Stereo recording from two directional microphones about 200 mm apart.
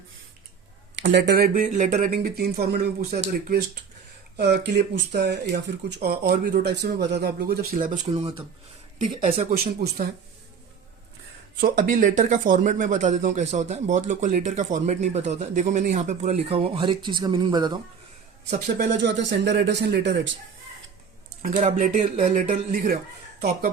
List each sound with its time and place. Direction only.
1.0 s speech: 60° right (ahead or behind)
4.4 s speech: 55° right (ahead or behind)
8.0 s speech: 30° right (ahead or behind)
11.6 s speech: 40° right (ahead or behind); by 17.7 s 20° right (ahead or behind)
18.5 s speech: 55° right (ahead or behind)
21.4 s speech: 40° right (ahead or behind)